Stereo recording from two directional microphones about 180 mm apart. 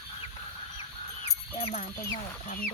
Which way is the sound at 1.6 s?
40° left (ahead or behind).